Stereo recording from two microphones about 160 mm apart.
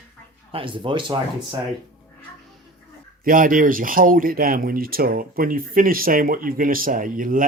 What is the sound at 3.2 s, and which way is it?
Speech, 60° right (ahead or behind).